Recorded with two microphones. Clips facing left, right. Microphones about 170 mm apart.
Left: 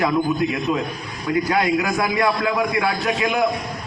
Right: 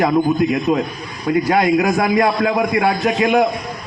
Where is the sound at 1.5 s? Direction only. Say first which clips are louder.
Right 6 dB; 30° right (ahead or behind).